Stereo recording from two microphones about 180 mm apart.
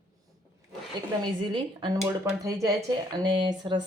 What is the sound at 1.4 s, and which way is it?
Speech, 25° right (ahead or behind).